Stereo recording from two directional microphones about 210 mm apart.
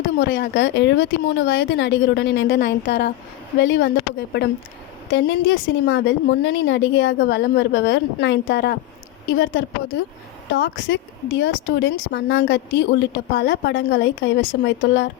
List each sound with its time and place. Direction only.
0.0 s speech: 60° left (ahead or behind)